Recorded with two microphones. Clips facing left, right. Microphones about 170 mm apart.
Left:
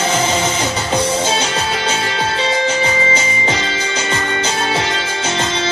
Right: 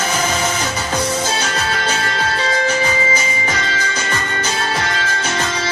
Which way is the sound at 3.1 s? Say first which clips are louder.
Left 2 dB; 25° left (ahead or behind).